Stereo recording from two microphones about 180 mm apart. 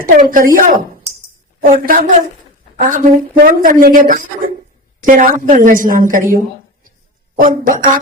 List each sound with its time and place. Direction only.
0.0 s a woman's voice: 50° right (ahead or behind)
7.3 s a woman's voice: 45° right (ahead or behind)